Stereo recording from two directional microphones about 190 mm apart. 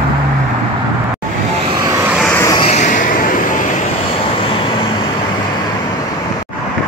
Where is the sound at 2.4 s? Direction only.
15° left (ahead or behind).